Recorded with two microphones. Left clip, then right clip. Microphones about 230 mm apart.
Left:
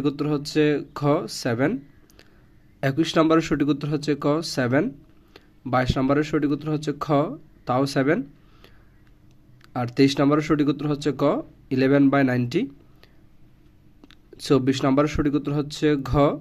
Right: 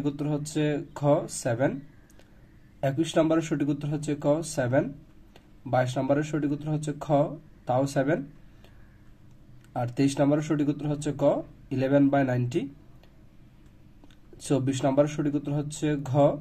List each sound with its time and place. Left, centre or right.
0.0 s speech: left
9.7 s speech: left
14.0 s speech: left